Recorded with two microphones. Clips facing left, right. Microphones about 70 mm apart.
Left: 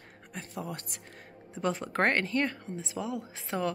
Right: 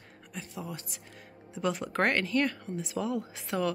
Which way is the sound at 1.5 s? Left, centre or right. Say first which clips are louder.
Even; left.